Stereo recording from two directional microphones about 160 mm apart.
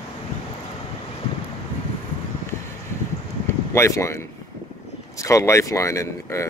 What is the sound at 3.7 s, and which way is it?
Speech, 20° left (ahead or behind).